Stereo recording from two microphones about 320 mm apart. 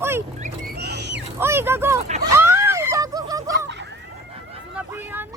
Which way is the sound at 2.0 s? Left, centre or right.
Right.